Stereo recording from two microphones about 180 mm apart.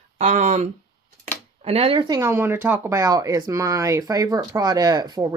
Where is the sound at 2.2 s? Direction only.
15° right (ahead or behind).